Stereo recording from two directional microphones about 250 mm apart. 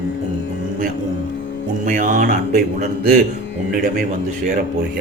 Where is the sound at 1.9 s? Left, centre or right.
Right.